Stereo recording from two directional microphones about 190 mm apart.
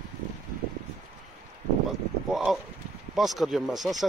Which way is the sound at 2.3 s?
Centre (ahead or behind).